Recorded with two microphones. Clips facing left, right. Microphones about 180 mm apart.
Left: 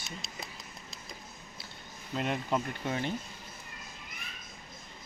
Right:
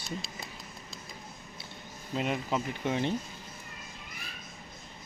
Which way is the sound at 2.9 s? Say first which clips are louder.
Right 5 dB; 30° right (ahead or behind).